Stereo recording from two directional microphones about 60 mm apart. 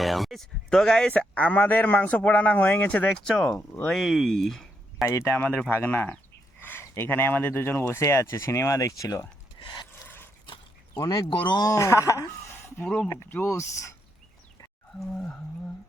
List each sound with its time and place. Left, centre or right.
0.0 s speech: centre
1.1 s a man's voice: left
3.1 s speech: centre
5.0 s speech: left
5.3 s speech: left
10.9 s speech: left
12.8 s a man's voice: centre
13.4 s speech: left